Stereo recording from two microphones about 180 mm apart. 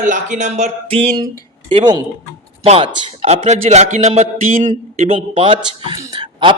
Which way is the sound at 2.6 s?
30° right (ahead or behind).